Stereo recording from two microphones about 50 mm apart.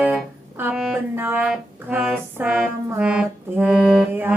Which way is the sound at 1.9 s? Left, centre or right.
Right.